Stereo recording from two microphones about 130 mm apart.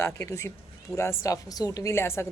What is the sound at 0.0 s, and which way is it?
A woman's voice, 20° left (ahead or behind).